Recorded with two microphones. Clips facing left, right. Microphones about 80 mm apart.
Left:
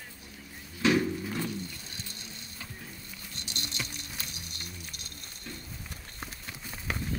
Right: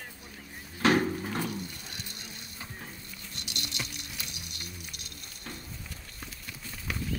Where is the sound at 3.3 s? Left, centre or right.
Left.